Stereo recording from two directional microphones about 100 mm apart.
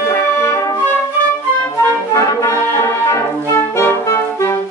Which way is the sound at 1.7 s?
25° left (ahead or behind).